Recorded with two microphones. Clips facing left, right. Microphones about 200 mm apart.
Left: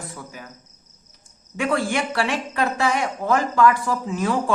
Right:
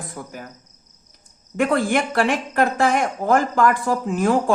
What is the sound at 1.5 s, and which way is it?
Speech, 50° right (ahead or behind).